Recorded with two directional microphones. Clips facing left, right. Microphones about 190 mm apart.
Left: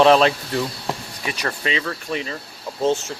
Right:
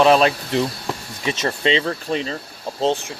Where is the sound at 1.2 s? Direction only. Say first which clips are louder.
Right 8 dB; 25° right (ahead or behind).